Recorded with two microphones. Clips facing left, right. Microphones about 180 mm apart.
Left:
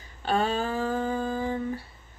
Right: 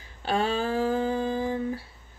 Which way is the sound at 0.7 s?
5° right (ahead or behind).